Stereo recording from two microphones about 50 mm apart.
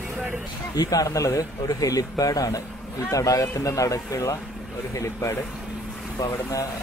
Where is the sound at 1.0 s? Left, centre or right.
Left.